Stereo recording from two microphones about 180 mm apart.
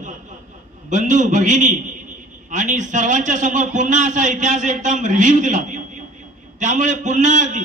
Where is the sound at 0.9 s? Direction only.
45° right (ahead or behind).